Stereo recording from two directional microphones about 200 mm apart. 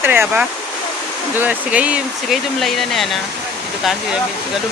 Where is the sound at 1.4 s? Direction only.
5° right (ahead or behind).